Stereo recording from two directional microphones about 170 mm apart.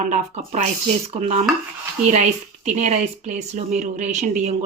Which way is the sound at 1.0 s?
40° right (ahead or behind).